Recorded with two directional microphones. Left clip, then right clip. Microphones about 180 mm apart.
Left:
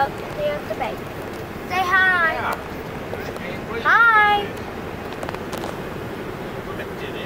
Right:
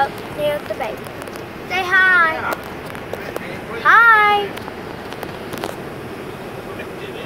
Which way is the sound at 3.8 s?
55° right (ahead or behind).